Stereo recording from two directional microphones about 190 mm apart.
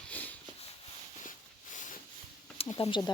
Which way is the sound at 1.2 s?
40° left (ahead or behind).